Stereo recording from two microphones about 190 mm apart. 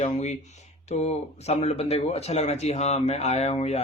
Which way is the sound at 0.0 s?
35° left (ahead or behind).